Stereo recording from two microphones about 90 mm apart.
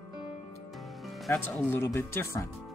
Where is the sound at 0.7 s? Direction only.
Centre (ahead or behind).